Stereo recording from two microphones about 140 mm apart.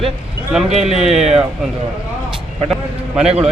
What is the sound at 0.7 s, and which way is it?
Speech, 50° right (ahead or behind).